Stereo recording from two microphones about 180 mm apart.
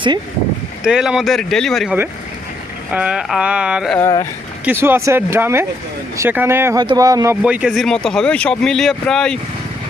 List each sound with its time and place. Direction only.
0.9 s speech: 5° right (ahead or behind); by 7.3 s 20° right (ahead or behind)
7.4 s speech: 5° right (ahead or behind)